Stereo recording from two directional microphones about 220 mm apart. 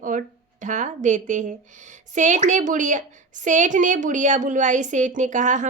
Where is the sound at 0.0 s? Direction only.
35° right (ahead or behind).